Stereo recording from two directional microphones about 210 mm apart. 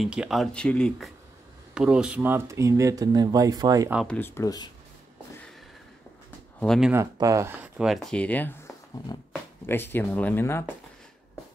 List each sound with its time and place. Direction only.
0.0 s speech: 5° right (ahead or behind)
3.9 s speech: centre (ahead or behind)
4.2 s speech: 15° left (ahead or behind)
6.6 s speech: centre (ahead or behind)
6.9 s speech: 15° right (ahead or behind); by 10.6 s 10° left (ahead or behind)